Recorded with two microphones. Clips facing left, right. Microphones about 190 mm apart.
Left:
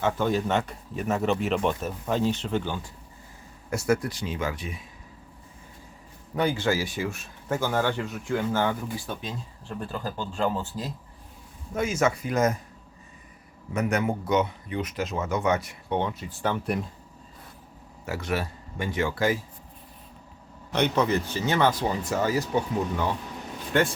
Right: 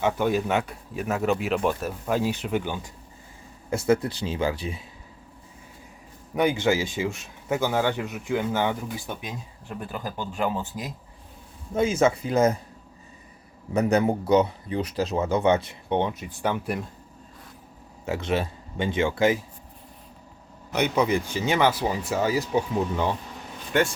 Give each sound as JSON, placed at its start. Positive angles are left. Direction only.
{"t": 0.0, "sound": "speech", "side_deg": -10}
{"t": 3.8, "sound": "speech", "side_deg": -30}
{"t": 6.3, "sound": "speech", "side_deg": -15}
{"t": 11.7, "sound": "speech", "side_deg": -30}
{"t": 13.7, "sound": "a man's voice", "side_deg": -35}
{"t": 18.0, "sound": "speech", "side_deg": -25}
{"t": 20.7, "sound": "speech", "side_deg": -10}